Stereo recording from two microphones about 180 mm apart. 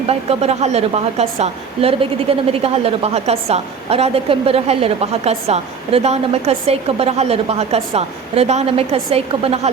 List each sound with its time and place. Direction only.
0.1 s a woman's voice: 35° right (ahead or behind)